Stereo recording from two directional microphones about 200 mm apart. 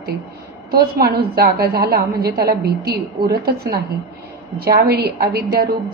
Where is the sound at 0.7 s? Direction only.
50° right (ahead or behind).